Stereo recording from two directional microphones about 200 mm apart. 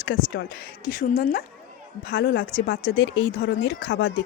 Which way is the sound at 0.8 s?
45° left (ahead or behind).